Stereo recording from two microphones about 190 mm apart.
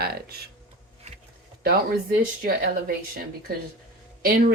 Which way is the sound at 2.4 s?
50° right (ahead or behind).